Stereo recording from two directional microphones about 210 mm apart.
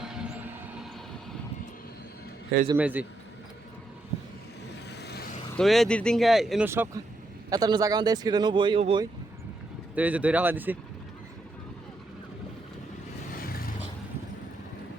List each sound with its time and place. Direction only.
0.0 s train: 5° right (ahead or behind)
2.7 s speech: 5° right (ahead or behind)
4.7 s vehicle: 50° left (ahead or behind)
5.5 s speech: centre (ahead or behind)
6.7 s speech: 10° right (ahead or behind)
9.9 s speech: 5° right (ahead or behind)